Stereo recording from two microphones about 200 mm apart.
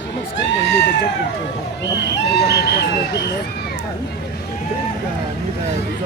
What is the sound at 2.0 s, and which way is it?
Speech, 55° left (ahead or behind).